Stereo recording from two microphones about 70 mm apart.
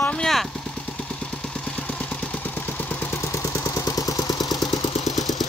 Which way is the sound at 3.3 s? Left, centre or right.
Left.